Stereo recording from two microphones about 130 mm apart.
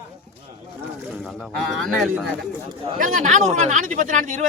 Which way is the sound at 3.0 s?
70° right (ahead or behind).